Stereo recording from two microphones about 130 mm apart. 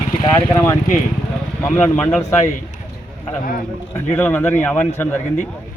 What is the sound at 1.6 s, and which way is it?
Speech, 15° left (ahead or behind).